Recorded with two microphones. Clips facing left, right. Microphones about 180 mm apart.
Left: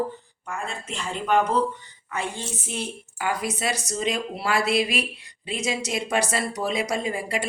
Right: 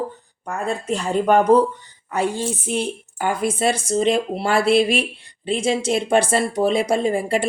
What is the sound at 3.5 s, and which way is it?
A woman's voice, 30° right (ahead or behind).